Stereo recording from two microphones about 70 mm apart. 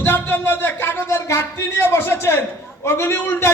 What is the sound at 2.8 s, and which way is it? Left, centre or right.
Speech, left.